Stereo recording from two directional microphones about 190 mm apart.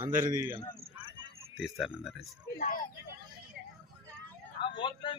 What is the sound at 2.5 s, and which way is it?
Speech, 45° left (ahead or behind).